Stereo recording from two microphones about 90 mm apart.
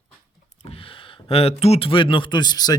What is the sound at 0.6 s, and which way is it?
Speech, 90° left.